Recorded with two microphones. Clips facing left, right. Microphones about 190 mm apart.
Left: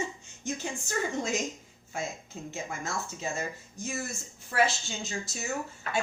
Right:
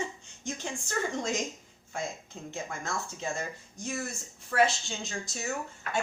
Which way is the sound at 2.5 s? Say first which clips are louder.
Even; 5° left (ahead or behind).